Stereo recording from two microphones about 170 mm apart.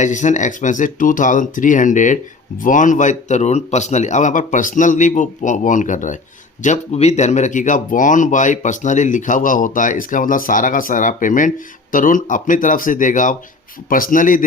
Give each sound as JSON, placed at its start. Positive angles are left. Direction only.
{"t": 0.0, "sound": "speech", "side_deg": 45}